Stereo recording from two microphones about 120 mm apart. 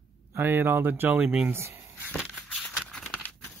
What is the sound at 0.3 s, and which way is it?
Speech, 20° right (ahead or behind).